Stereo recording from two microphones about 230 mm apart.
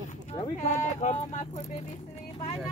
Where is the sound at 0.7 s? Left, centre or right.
Left.